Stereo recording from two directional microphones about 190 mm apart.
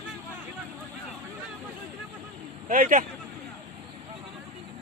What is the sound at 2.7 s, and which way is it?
Speech, 45° right (ahead or behind).